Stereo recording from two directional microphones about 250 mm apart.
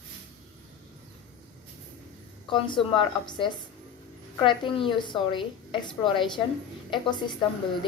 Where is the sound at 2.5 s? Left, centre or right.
Centre.